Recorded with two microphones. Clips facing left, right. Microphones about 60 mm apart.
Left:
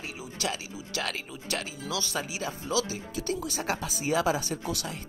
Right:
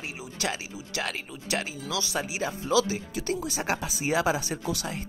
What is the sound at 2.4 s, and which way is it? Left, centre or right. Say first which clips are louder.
Speech: right 7 dB; right.